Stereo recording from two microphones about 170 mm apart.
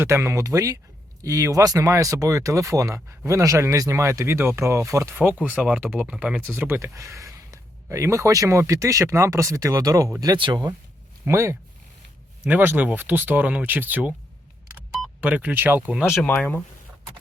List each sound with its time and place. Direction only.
0.0 s speech: 15° right (ahead or behind)
15.2 s speech: 10° right (ahead or behind)
16.0 s speech: 15° left (ahead or behind)